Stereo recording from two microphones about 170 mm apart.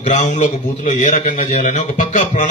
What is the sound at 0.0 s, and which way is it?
A man's voice, 45° left (ahead or behind).